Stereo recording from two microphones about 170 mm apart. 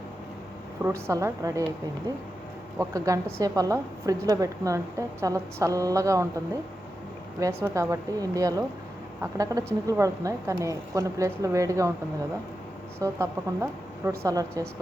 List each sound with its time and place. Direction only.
0.8 s a woman's voice: 15° right (ahead or behind)
2.7 s a woman's voice: 20° right (ahead or behind)
13.0 s a woman's voice: 20° right (ahead or behind)